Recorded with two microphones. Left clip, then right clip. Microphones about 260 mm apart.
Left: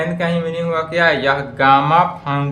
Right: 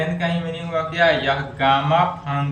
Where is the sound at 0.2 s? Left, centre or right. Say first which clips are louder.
Left 6 dB; left.